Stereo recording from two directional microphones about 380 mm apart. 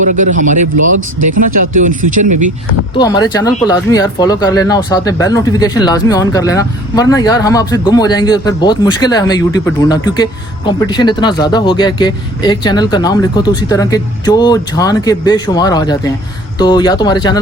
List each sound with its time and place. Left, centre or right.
0.1 s speech: centre
0.9 s speech: right
1.7 s speech: right
3.0 s speech: centre